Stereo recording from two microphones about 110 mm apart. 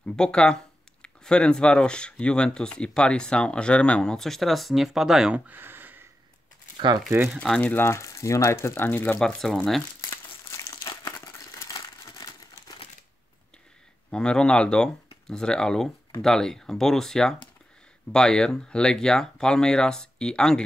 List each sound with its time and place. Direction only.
0.0 s speech: 5° left (ahead or behind)
5.5 s a sound: 20° right (ahead or behind)
7.3 s speech: 10° left (ahead or behind)
7.7 s speech: 25° left (ahead or behind)
9.2 s speech: 5° left (ahead or behind)
10.5 s crumpling: 30° left (ahead or behind)
14.1 s speech: 5° left (ahead or behind)